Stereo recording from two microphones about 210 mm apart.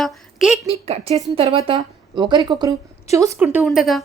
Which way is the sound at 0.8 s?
30° right (ahead or behind).